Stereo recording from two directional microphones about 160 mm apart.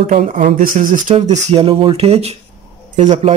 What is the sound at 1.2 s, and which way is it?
Speech, 45° right (ahead or behind).